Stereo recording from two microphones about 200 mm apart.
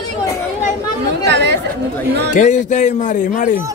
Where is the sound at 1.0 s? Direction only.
60° right (ahead or behind).